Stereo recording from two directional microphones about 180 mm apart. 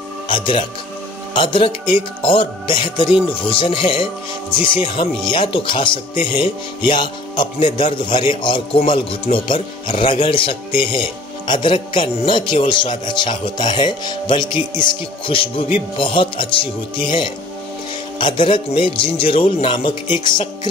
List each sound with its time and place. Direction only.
0.3 s a man's voice: 30° left (ahead or behind)